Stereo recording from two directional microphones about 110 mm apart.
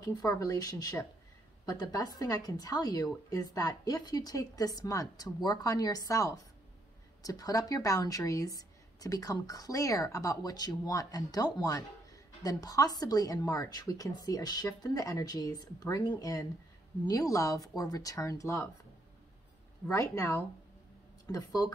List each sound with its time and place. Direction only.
0.1 s a woman's voice: 35° left (ahead or behind)
19.9 s a woman's voice: 30° left (ahead or behind)